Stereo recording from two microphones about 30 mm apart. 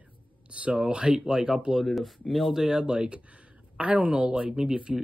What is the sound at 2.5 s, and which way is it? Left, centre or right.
Speech, right.